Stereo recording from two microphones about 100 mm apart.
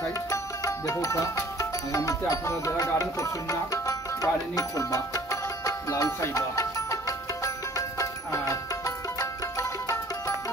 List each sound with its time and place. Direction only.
0.3 s music: 35° left (ahead or behind)